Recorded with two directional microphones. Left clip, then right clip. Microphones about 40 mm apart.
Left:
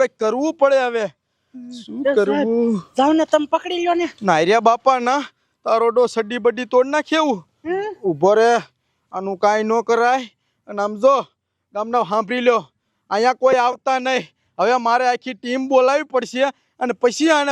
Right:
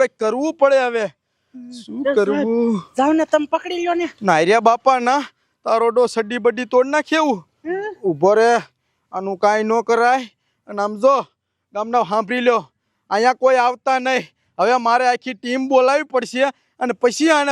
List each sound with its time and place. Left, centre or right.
0.0 s speech: right
13.1 s a man's voice: centre